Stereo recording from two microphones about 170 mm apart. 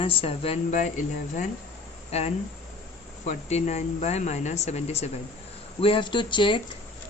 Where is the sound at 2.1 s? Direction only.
40° left (ahead or behind).